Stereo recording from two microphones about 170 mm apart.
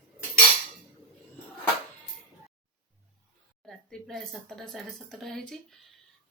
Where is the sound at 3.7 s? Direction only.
Centre (ahead or behind).